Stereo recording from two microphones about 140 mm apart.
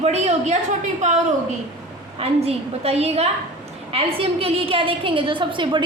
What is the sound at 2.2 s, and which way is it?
A woman's voice, 45° right (ahead or behind).